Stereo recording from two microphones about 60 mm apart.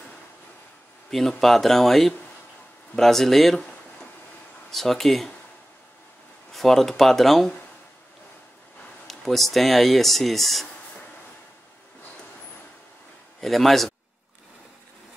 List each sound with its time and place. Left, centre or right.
1.4 s speech: centre
6.5 s speech: centre
9.0 s speech: centre
13.4 s a man's voice: centre